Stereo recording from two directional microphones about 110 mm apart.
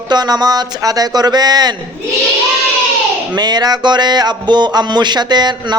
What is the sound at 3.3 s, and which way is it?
Speech, 40° right (ahead or behind).